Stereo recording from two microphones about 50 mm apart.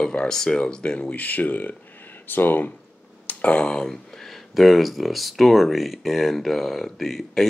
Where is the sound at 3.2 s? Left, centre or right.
Left.